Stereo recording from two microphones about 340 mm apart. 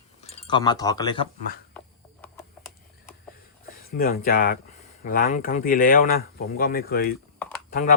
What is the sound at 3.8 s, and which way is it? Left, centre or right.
Speech, left.